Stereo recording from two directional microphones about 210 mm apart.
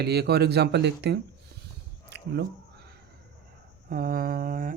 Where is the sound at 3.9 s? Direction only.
45° right (ahead or behind).